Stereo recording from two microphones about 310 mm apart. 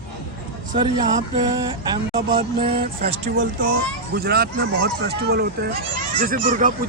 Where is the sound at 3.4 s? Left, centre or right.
Right.